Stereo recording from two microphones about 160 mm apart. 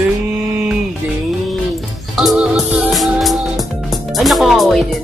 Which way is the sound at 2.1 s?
5° right (ahead or behind).